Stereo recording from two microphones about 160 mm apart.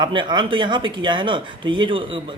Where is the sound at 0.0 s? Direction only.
30° right (ahead or behind).